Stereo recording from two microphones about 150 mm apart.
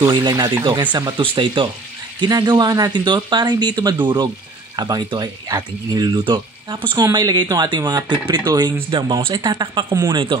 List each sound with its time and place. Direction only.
0.1 s speech: 30° right (ahead or behind)